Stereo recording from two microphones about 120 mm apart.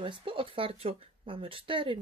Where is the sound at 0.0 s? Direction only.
45° right (ahead or behind).